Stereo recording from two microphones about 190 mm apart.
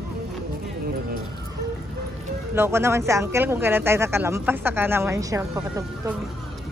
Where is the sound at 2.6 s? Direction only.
15° right (ahead or behind).